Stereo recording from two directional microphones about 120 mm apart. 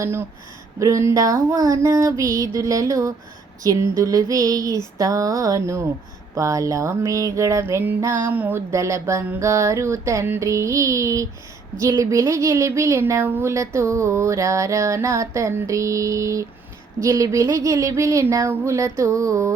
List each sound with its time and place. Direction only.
0.0 s speech: 20° right (ahead or behind)
8.3 s a sound: 15° right (ahead or behind)
8.7 s speech: 25° right (ahead or behind)